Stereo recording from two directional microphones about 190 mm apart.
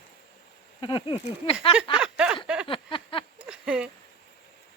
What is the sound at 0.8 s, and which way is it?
Speech, 25° left (ahead or behind).